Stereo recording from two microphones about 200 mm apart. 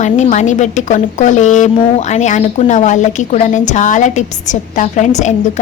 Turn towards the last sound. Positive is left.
turn(degrees=35)  # may be behind; listen again after turning